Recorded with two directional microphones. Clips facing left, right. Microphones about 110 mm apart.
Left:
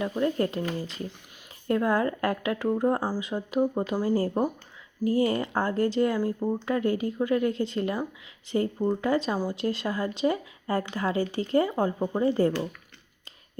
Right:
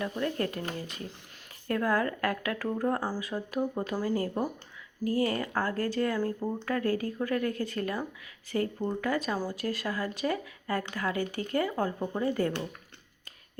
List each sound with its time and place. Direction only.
0.0 s speech: 25° left (ahead or behind)